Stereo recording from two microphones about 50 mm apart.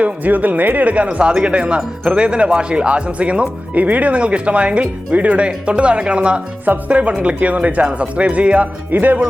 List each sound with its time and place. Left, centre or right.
0.0 s speech: right